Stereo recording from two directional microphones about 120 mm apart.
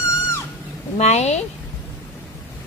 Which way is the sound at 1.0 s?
65° left (ahead or behind).